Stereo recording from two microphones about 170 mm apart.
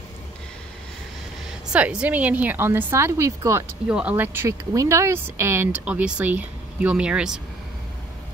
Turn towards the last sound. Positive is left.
turn(degrees=-5)  # may be behind; listen again after turning